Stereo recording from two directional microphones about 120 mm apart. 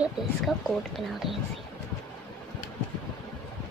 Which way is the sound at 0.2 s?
5° right (ahead or behind).